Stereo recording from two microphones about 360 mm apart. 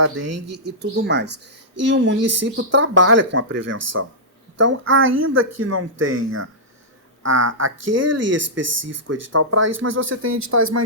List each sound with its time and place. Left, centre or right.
0.0 s speech: right
0.6 s speech: right
3.6 s speech: right
4.6 s speech: right
7.2 s speech: right
10.1 s speech: right